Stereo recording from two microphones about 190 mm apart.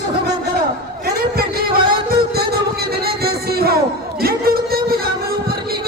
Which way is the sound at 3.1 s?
55° right (ahead or behind).